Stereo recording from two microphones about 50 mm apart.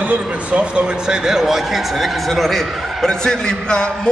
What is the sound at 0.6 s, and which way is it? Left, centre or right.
Speech, centre.